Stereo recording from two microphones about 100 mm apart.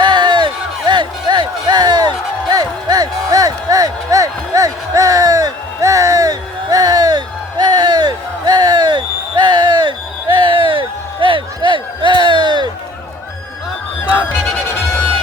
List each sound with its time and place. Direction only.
0.0 s music: 50° right (ahead or behind)